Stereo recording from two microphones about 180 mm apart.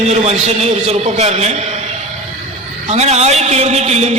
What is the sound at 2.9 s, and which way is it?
A man's voice, 35° right (ahead or behind).